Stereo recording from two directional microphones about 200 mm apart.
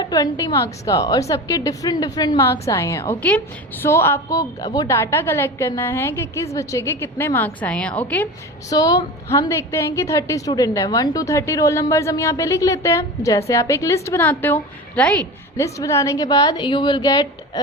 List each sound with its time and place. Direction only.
0.0 s a woman's voice: 20° left (ahead or behind)
8.7 s a woman's voice: 20° left (ahead or behind)